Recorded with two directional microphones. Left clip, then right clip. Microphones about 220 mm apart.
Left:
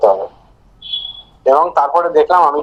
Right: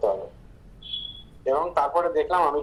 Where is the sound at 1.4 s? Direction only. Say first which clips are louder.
Left 12 dB; 45° left (ahead or behind).